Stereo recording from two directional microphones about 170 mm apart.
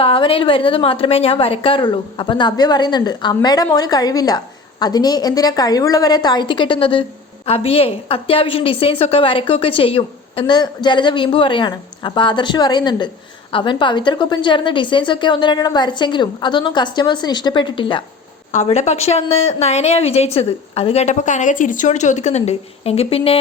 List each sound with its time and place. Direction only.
0.0 s a woman's voice: 30° left (ahead or behind)
18.5 s a woman's voice: 40° left (ahead or behind)